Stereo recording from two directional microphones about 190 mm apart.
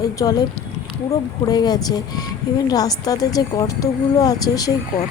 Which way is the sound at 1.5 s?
20° left (ahead or behind).